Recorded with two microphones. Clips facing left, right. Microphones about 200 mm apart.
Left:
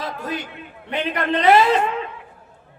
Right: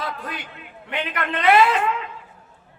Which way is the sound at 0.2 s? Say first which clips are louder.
Left 6 dB; 45° left (ahead or behind).